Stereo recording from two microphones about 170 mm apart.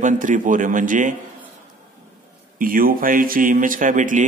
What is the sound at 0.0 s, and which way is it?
Speech, 50° right (ahead or behind).